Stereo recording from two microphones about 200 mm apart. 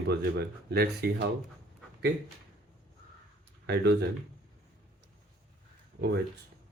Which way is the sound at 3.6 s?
55° right (ahead or behind).